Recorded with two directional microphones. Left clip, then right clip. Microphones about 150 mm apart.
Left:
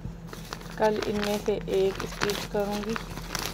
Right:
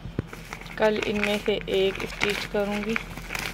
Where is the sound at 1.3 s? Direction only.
5° left (ahead or behind).